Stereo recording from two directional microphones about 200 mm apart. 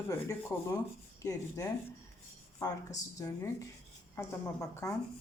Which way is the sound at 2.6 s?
15° left (ahead or behind).